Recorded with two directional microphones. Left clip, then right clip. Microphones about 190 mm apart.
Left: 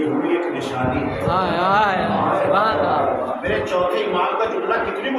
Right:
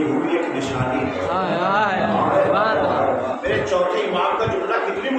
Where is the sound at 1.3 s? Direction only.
20° left (ahead or behind).